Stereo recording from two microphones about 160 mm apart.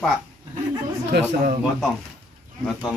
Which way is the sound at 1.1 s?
90° right.